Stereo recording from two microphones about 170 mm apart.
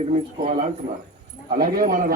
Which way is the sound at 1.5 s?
55° right (ahead or behind).